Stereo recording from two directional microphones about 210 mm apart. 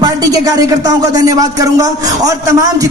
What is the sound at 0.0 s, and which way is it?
A woman's voice, 15° right (ahead or behind).